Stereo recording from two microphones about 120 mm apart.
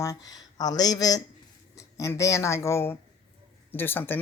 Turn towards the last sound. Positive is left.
turn(degrees=15)  # may be behind; listen again after turning